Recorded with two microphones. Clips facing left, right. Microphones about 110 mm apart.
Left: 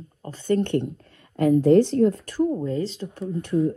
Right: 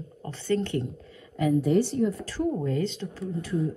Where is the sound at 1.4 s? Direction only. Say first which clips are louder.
Left 6 dB; 90° left; by 3.6 s 65° left (ahead or behind).